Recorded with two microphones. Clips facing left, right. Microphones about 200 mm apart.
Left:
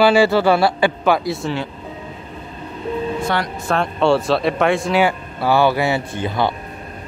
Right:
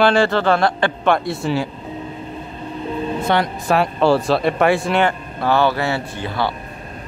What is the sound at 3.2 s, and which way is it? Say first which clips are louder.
Speech: right 3 dB; 20° right (ahead or behind).